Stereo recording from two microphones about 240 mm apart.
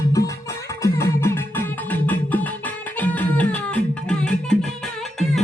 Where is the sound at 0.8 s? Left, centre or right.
Centre.